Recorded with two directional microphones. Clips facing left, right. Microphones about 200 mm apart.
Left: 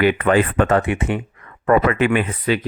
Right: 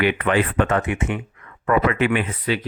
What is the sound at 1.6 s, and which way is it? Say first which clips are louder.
Speech: left 3 dB; 45° left (ahead or behind).